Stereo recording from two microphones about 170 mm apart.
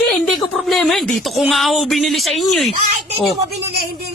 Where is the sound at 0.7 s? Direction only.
Centre (ahead or behind).